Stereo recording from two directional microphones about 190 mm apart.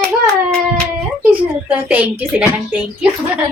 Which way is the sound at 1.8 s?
10° right (ahead or behind).